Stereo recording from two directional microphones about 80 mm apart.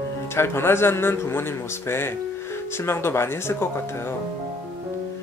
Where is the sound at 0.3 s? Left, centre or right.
Left.